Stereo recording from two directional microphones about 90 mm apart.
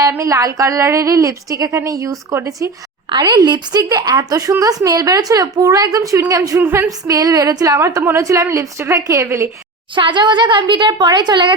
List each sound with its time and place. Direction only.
0.2 s a woman's voice: 35° right (ahead or behind)
3.1 s a woman's voice: 50° right (ahead or behind)
6.6 s a sound: 25° right (ahead or behind)
7.0 s a woman's voice: 45° right (ahead or behind)
7.8 s a woman's voice: 30° right (ahead or behind)
9.9 s speech: 60° right (ahead or behind)